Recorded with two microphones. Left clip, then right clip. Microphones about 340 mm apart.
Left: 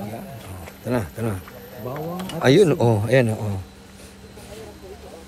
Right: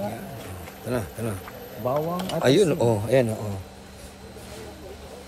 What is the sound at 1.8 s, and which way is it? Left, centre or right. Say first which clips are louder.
Speech: right 7 dB; right.